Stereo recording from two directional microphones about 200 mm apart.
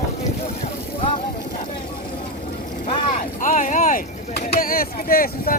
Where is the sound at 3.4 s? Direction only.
40° left (ahead or behind).